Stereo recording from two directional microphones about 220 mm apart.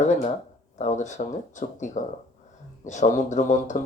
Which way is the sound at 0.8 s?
35° left (ahead or behind).